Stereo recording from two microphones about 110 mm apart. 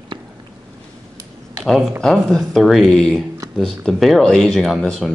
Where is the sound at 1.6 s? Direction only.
5° left (ahead or behind).